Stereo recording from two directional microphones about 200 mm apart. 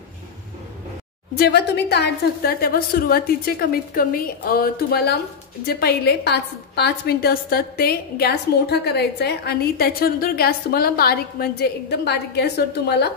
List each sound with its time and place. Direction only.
1.4 s a woman's voice: 55° left (ahead or behind)